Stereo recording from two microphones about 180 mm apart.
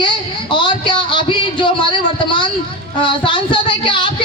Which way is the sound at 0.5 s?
25° left (ahead or behind).